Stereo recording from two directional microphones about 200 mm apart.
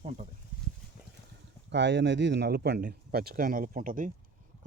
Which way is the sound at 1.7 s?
60° right (ahead or behind).